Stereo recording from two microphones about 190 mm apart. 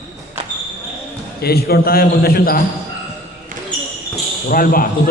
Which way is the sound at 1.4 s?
55° left (ahead or behind).